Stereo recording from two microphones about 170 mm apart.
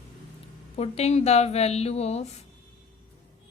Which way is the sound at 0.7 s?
40° left (ahead or behind).